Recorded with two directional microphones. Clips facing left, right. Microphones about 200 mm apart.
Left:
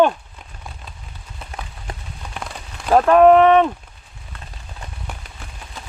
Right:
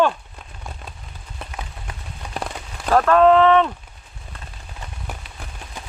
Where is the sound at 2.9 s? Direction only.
20° left (ahead or behind).